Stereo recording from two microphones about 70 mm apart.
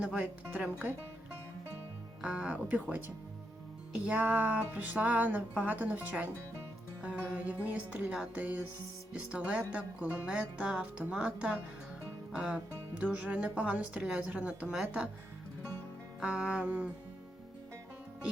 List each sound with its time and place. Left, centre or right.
0.0 s music: centre
2.2 s speech: centre
4.0 s music: right
9.3 s speech: centre
13.0 s music: right
16.2 s music: centre